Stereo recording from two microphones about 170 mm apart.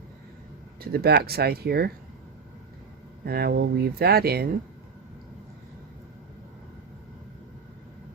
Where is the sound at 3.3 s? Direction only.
65° right (ahead or behind).